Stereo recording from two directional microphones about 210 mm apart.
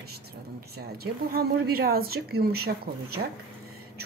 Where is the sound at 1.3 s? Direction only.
45° right (ahead or behind).